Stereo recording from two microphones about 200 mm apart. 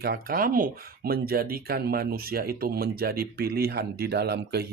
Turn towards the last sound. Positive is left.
turn(degrees=-55)  # may be behind; listen again after turning